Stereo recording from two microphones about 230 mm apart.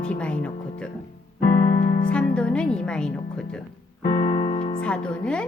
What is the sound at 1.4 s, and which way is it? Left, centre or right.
Piano, left.